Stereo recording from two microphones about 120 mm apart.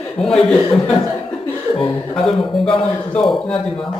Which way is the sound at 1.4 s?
15° left (ahead or behind).